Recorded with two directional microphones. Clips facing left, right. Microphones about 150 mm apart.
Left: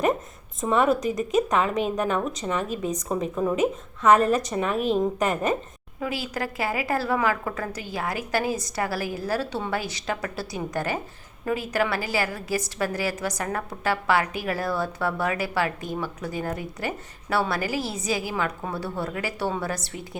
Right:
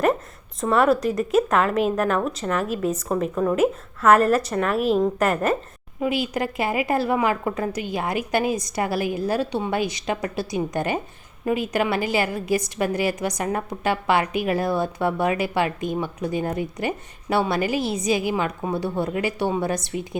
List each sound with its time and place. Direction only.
0.6 s a woman's voice: centre (ahead or behind)
6.0 s a woman's voice: 20° right (ahead or behind)